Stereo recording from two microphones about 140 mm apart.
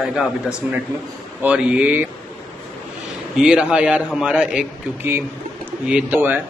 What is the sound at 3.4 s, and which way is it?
A man's voice, 5° right (ahead or behind).